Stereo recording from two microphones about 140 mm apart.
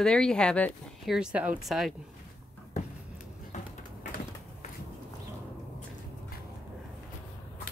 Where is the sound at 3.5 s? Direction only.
60° left (ahead or behind).